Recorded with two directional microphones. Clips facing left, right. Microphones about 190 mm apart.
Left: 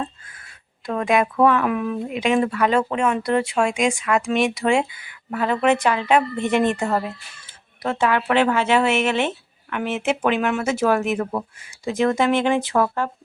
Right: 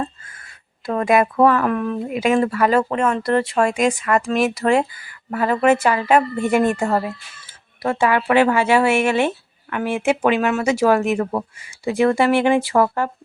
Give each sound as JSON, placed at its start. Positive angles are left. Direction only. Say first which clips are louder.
{"t": 0.9, "sound": "speech", "louder": "right 3 dB", "side_deg": -5}